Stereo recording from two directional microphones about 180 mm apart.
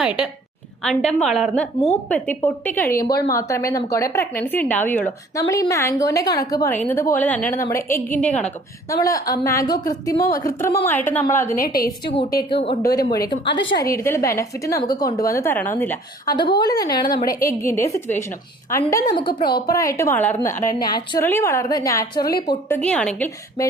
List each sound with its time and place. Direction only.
0.0 s a woman's voice: 5° right (ahead or behind); by 8.0 s 15° left (ahead or behind)
8.1 s a woman's voice: 40° left (ahead or behind)
8.9 s a woman's voice: 20° left (ahead or behind)
11.6 s a woman's voice: 55° left (ahead or behind)
12.4 s a woman's voice: 30° left (ahead or behind); by 16.0 s 10° left (ahead or behind)
16.2 s a woman's voice: 25° left (ahead or behind)
22.7 s a woman's voice: 5° left (ahead or behind)